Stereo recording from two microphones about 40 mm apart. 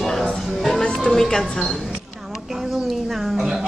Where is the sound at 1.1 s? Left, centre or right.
Centre.